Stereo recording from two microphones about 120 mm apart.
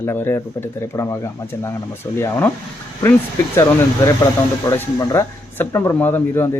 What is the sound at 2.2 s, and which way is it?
Speech, 20° left (ahead or behind).